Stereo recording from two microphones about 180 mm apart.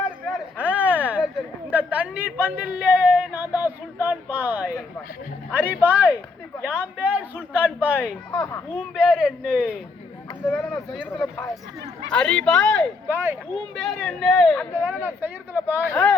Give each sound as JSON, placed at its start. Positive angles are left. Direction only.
{"t": 0.3, "sound": "a sound", "side_deg": -10}
{"t": 5.5, "sound": "a man's voice", "side_deg": -10}
{"t": 8.3, "sound": "a child's voice", "side_deg": 20}
{"t": 9.0, "sound": "speech", "side_deg": -5}
{"t": 10.4, "sound": "speech", "side_deg": 5}
{"t": 13.1, "sound": "a man's voice", "side_deg": -10}
{"t": 13.7, "sound": "speech", "side_deg": 0}
{"t": 15.0, "sound": "a man's voice", "side_deg": -10}
{"t": 15.9, "sound": "speech", "side_deg": 10}